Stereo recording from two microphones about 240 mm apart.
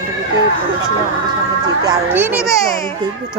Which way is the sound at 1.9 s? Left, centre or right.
Centre.